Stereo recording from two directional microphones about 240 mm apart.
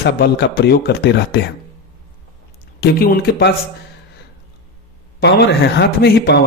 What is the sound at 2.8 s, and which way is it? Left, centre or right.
Speech, left.